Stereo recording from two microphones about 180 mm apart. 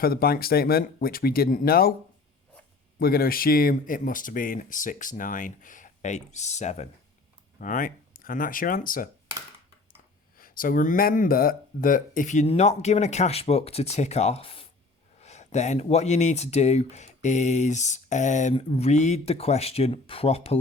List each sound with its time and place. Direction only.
0.0 s speech: 55° left (ahead or behind)
3.0 s speech: 55° left (ahead or behind)
10.3 s speech: 50° left (ahead or behind); by 20.6 s 35° left (ahead or behind)